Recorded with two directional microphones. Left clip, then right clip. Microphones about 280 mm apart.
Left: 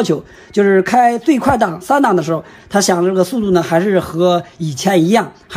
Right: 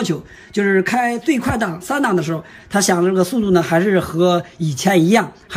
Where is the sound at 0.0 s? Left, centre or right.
Centre.